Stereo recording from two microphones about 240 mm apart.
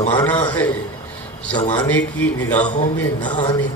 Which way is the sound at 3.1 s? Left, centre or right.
Centre.